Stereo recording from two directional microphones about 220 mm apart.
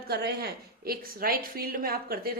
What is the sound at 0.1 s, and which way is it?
A woman's voice, 45° right (ahead or behind).